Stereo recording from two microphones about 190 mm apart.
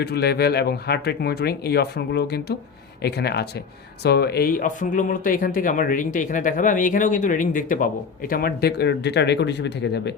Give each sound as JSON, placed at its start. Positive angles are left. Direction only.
{"t": 0.0, "sound": "speech", "side_deg": 60}